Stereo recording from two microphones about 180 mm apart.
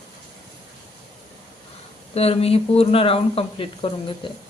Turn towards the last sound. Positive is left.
turn(degrees=30)  # may be behind; listen again after turning